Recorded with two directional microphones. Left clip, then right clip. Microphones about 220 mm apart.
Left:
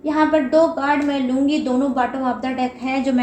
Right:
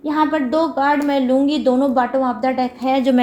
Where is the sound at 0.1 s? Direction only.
40° right (ahead or behind).